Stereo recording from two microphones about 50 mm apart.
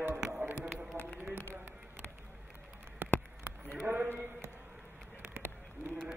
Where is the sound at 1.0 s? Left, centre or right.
Left.